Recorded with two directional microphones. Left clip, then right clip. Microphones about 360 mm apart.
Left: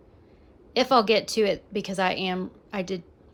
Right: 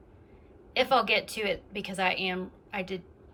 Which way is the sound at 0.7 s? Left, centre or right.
Centre.